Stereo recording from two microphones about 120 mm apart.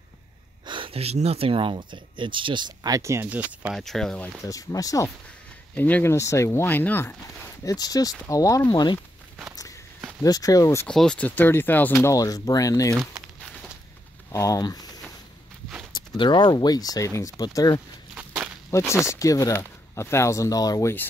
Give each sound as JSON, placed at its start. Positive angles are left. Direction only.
{"t": 0.7, "sound": "speech", "side_deg": -45}
{"t": 3.3, "sound": "speech", "side_deg": -10}
{"t": 3.7, "sound": "speech", "side_deg": 5}
{"t": 4.4, "sound": "speech", "side_deg": 30}
{"t": 5.8, "sound": "speech", "side_deg": 15}
{"t": 6.1, "sound": "speech", "side_deg": 25}
{"t": 7.6, "sound": "speech", "side_deg": 30}
{"t": 10.2, "sound": "speech", "side_deg": 30}
{"t": 10.9, "sound": "speech", "side_deg": 5}
{"t": 14.3, "sound": "speech", "side_deg": 30}
{"t": 16.2, "sound": "speech", "side_deg": 40}
{"t": 18.1, "sound": "walk", "side_deg": -10}
{"t": 18.7, "sound": "speech", "side_deg": 25}